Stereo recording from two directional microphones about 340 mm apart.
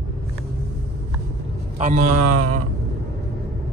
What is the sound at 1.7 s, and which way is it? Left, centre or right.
Speech, right.